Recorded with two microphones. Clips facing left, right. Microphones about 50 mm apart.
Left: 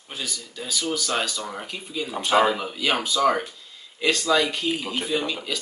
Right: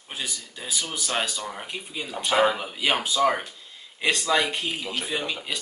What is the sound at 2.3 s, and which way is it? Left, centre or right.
Speech, centre.